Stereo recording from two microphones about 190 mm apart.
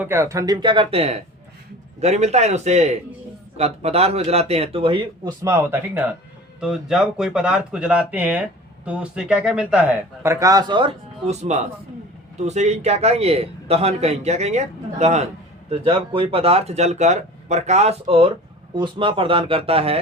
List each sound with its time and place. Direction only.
0.0 s a man's voice: 15° right (ahead or behind)
10.2 s a man's voice: 20° right (ahead or behind)